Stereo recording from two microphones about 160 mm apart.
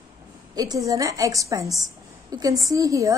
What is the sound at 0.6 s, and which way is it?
A woman's voice, 20° right (ahead or behind).